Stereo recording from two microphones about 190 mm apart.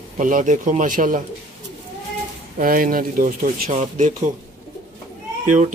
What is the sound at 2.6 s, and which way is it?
Speech, 45° right (ahead or behind).